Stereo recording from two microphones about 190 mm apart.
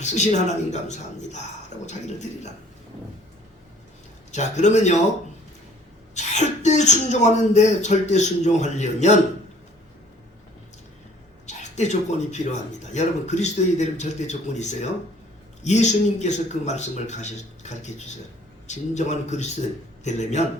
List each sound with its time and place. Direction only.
0.0 s speech: 40° left (ahead or behind)
4.3 s speech: 40° left (ahead or behind)
6.1 s speech: 35° left (ahead or behind)
11.4 s speech: 40° left (ahead or behind)